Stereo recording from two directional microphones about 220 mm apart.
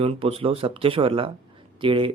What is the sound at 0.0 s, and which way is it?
Speech, 25° right (ahead or behind).